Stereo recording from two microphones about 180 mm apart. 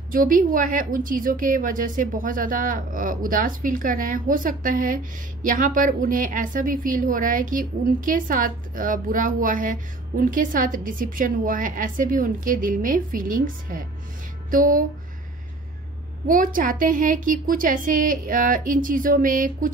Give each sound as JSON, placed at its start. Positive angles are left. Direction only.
{"t": 0.1, "sound": "a woman's voice", "side_deg": -50}
{"t": 16.3, "sound": "a woman's voice", "side_deg": -50}